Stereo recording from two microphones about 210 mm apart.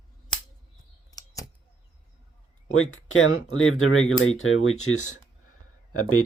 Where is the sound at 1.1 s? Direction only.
15° left (ahead or behind).